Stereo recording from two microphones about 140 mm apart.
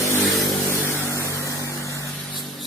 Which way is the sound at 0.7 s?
20° left (ahead or behind).